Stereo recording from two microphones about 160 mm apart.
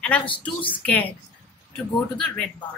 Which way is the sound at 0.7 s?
10° left (ahead or behind).